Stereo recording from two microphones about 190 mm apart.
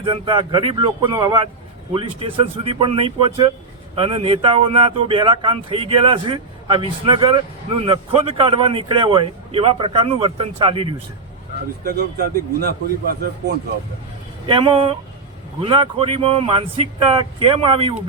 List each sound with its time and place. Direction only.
0.0 s speech: 25° right (ahead or behind)
11.9 s speech: 55° right (ahead or behind)
14.4 s speech: 30° right (ahead or behind)